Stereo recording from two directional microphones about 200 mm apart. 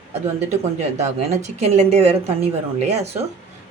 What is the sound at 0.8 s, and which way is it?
A woman's voice, 35° right (ahead or behind).